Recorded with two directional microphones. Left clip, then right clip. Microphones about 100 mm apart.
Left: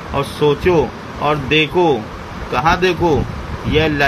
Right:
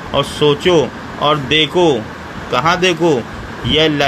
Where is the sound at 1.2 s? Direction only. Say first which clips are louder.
Right 2 dB; 25° right (ahead or behind).